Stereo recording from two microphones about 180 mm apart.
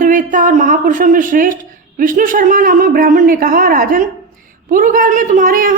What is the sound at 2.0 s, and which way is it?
A woman's voice, 50° right (ahead or behind).